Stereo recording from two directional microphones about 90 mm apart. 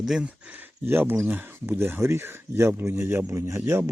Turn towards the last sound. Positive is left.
turn(degrees=-25)  # may be behind; listen again after turning